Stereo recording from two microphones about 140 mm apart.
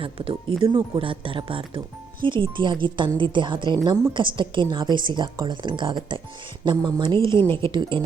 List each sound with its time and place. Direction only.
0.0 s speech: 40° right (ahead or behind)